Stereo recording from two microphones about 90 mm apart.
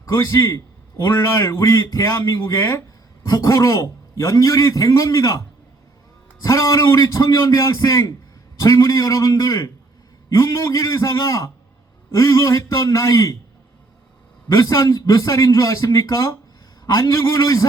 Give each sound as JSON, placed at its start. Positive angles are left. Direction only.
{"t": 0.0, "sound": "a man's voice", "side_deg": 30}
{"t": 6.4, "sound": "a man's voice", "side_deg": 35}
{"t": 14.5, "sound": "a man's voice", "side_deg": 40}